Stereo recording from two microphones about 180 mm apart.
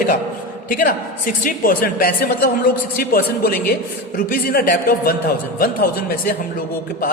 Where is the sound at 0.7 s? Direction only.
50° left (ahead or behind).